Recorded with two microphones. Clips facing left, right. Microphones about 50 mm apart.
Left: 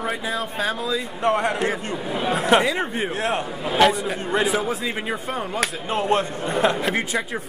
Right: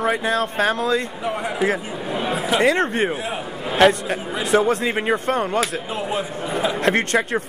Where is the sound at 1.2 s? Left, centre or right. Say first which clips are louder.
Left 3 dB; centre.